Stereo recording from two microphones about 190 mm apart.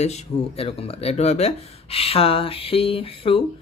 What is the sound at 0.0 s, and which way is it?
Speech, 35° left (ahead or behind).